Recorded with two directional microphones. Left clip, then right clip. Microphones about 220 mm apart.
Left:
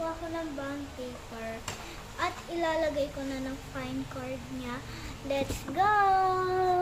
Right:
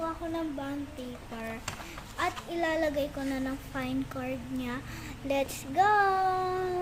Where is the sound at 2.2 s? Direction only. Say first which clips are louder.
Right 1 dB; 40° right (ahead or behind).